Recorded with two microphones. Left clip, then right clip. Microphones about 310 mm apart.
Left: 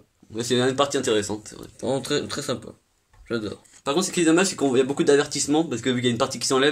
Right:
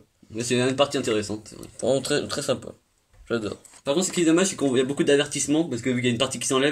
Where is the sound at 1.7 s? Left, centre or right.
Centre.